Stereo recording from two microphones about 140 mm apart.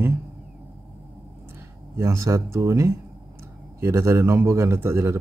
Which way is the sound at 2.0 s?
20° right (ahead or behind).